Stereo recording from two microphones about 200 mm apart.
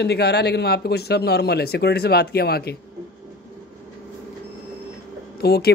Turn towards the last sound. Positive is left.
turn(degrees=55)  # may be behind; listen again after turning